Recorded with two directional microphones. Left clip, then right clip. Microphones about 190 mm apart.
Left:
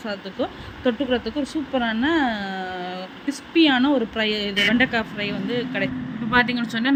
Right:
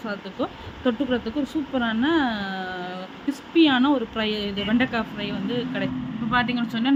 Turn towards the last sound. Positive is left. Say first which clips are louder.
# left 3 dB
turn(degrees=15)  # may be behind; listen again after turning